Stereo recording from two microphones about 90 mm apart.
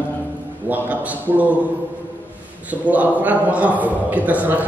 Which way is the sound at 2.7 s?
15° right (ahead or behind).